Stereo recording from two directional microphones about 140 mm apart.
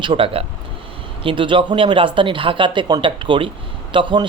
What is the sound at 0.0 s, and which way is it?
Speech, 40° right (ahead or behind).